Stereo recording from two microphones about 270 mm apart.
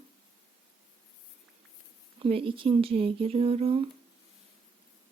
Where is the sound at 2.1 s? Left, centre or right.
Right.